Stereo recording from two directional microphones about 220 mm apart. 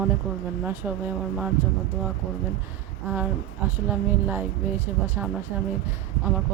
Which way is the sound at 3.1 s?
10° right (ahead or behind).